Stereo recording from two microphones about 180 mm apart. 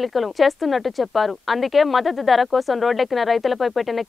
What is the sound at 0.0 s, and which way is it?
Speech, centre (ahead or behind).